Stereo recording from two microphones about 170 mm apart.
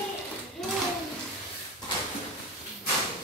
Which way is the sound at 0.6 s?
Centre (ahead or behind).